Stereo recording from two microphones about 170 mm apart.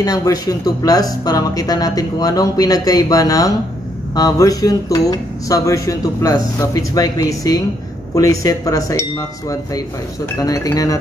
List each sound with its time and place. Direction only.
0.0 s speech: 20° left (ahead or behind)